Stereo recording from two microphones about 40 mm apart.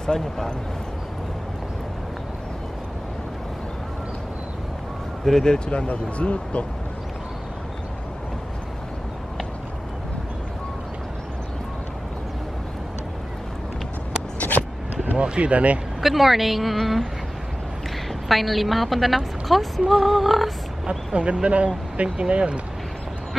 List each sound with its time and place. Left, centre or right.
0.0 s a man's voice: centre
5.2 s a man's voice: centre
5.9 s speech: left
15.1 s speech: right
16.0 s speech: centre
18.3 s speech: centre
21.1 s speech: right